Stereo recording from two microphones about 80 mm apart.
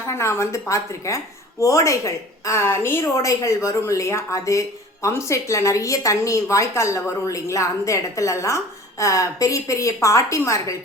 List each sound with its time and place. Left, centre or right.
0.0 s a woman's voice: left